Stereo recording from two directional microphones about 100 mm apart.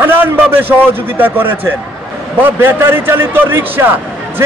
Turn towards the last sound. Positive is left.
turn(degrees=-25)  # may be behind; listen again after turning